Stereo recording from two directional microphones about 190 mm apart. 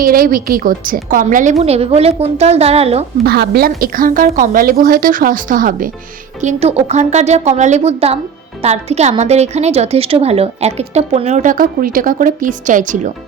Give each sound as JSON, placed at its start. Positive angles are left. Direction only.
{"t": 0.0, "sound": "a woman's voice", "side_deg": -50}
{"t": 3.2, "sound": "a woman's voice", "side_deg": -55}